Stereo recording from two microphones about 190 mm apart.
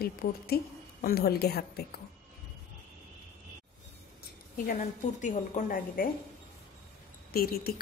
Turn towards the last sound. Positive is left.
turn(degrees=50)  # may be behind; listen again after turning